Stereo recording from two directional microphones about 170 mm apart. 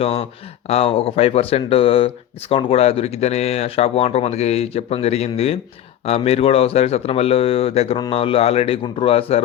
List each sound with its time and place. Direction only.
0.0 s speech: 35° left (ahead or behind)